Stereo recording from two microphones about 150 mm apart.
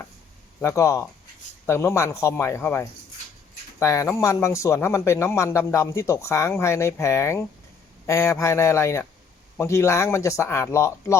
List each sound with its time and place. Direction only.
0.6 s speech: 20° left (ahead or behind)